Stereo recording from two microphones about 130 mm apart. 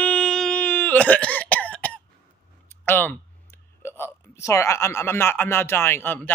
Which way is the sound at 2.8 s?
15° left (ahead or behind).